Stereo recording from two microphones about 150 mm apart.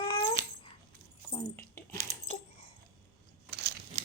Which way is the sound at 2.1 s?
50° right (ahead or behind).